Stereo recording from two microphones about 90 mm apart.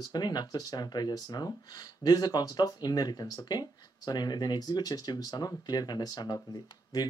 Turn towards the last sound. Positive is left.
turn(degrees=50)  # may be behind; listen again after turning